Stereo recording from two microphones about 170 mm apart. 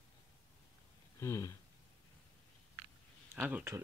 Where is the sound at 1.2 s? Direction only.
15° left (ahead or behind).